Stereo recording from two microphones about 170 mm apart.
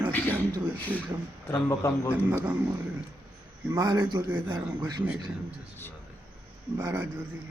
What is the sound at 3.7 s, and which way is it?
Speech, 20° right (ahead or behind).